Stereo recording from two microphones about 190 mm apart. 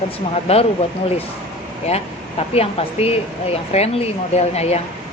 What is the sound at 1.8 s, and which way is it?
Speech, 30° left (ahead or behind).